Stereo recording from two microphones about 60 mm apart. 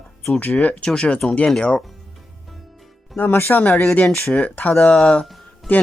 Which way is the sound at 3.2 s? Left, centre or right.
Left.